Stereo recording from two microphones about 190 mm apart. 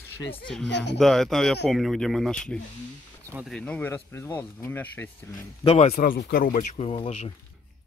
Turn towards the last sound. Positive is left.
turn(degrees=30)  # may be behind; listen again after turning